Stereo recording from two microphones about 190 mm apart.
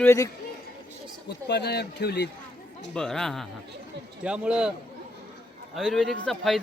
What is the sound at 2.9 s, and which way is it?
Speech, 5° left (ahead or behind).